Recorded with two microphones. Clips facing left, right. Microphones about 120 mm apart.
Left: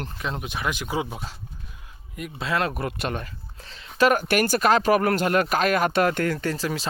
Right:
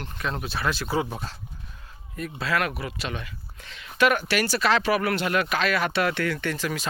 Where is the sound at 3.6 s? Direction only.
35° left (ahead or behind).